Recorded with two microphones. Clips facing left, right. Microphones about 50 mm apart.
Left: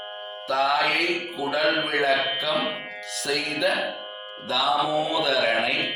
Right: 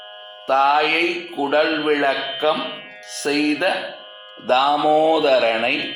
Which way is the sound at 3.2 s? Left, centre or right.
Right.